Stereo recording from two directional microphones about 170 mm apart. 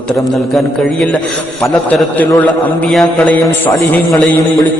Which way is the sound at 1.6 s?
5° left (ahead or behind).